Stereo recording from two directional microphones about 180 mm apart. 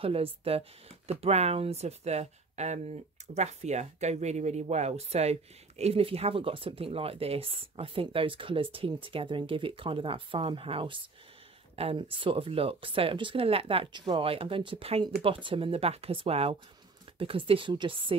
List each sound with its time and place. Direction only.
0.0 s speech: 30° right (ahead or behind)